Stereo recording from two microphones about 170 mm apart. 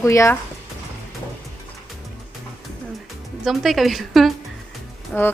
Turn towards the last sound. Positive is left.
turn(degrees=5)  # may be behind; listen again after turning